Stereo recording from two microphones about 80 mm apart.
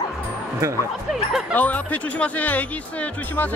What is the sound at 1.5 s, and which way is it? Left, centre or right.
Speech, left.